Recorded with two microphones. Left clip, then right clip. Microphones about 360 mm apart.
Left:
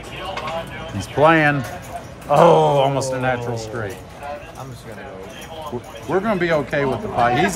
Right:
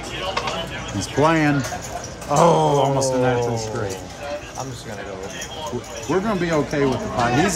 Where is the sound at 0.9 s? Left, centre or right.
Left.